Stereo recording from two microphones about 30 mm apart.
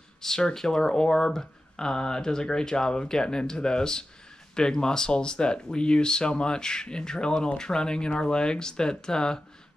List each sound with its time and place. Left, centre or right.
0.2 s speech: centre